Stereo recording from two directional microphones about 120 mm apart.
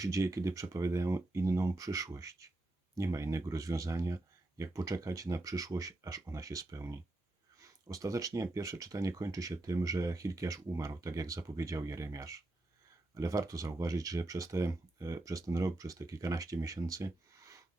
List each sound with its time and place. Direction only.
0.0 s speech: 25° right (ahead or behind)